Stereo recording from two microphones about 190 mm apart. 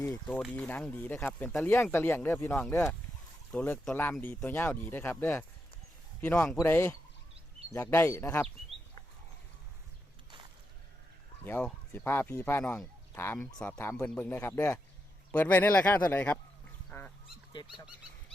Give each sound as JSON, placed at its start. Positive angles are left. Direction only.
{"t": 0.0, "sound": "speech", "side_deg": 15}
{"t": 0.3, "sound": "speech", "side_deg": 5}
{"t": 1.7, "sound": "speech", "side_deg": 10}
{"t": 11.4, "sound": "speech", "side_deg": 10}
{"t": 16.9, "sound": "goose", "side_deg": 10}